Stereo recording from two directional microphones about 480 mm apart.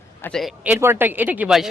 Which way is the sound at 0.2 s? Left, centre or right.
Centre.